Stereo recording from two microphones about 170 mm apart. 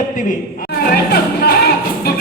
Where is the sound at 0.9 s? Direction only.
65° left (ahead or behind).